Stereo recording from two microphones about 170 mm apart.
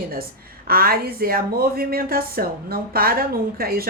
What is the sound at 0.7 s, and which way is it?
Speech, 60° right (ahead or behind).